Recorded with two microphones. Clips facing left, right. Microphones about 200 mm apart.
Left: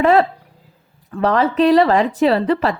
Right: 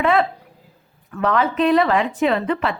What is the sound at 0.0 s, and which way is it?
Speech, 40° left (ahead or behind).